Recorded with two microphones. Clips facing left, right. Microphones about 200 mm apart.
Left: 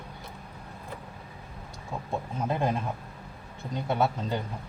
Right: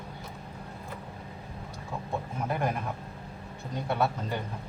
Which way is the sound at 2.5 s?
25° left (ahead or behind).